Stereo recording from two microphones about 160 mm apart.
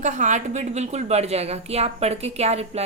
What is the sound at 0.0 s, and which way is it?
A woman's voice, 50° right (ahead or behind).